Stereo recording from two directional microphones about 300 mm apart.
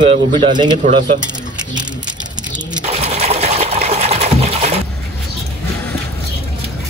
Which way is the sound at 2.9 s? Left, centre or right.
Right.